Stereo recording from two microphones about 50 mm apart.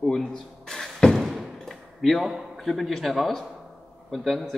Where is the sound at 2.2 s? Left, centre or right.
Centre.